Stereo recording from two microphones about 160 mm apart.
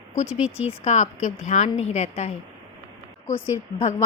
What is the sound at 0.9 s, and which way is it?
A woman's voice, 45° left (ahead or behind).